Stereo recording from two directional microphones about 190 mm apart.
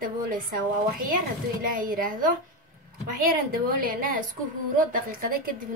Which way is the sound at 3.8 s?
45° right (ahead or behind).